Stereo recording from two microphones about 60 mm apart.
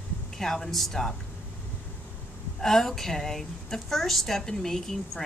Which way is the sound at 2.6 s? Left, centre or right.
Centre.